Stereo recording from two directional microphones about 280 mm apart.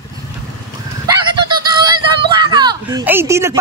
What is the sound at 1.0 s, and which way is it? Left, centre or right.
Goose, centre.